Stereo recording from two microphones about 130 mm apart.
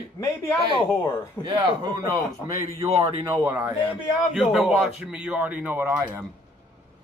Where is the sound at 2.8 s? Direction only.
50° right (ahead or behind).